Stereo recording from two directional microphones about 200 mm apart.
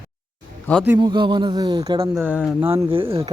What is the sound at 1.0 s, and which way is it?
Speech, 25° right (ahead or behind).